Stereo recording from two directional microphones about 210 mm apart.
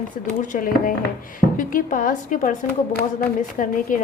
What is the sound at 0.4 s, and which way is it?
A woman's voice, 40° left (ahead or behind).